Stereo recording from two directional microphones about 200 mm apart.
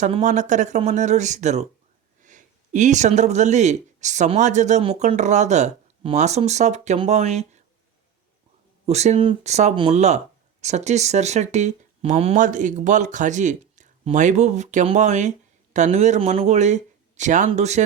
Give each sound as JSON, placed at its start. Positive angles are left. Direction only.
{"t": 0.0, "sound": "speech", "side_deg": -35}
{"t": 8.9, "sound": "speech", "side_deg": -35}